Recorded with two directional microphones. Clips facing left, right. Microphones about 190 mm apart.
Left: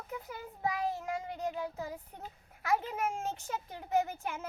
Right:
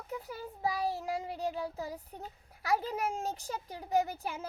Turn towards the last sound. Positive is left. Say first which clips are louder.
# right 1 dB
turn(degrees=-35)  # may be behind; listen again after turning